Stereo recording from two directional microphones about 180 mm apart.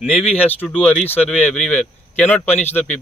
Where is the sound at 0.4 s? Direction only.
10° left (ahead or behind).